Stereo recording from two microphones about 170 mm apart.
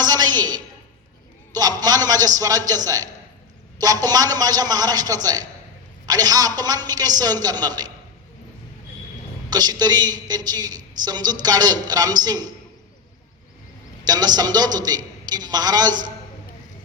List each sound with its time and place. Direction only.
0.0 s a sound: 25° right (ahead or behind)
1.5 s a man's voice: 25° right (ahead or behind)
9.5 s a man's voice: 25° right (ahead or behind)
14.1 s a man's voice: 25° right (ahead or behind)